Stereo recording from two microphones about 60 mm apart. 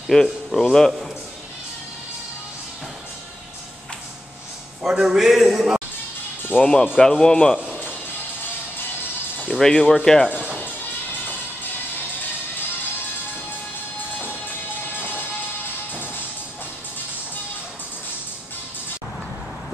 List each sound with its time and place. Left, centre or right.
0.1 s speech: centre
4.8 s a man's voice: centre
6.6 s speech: centre
9.6 s speech: centre
10.3 s speech: right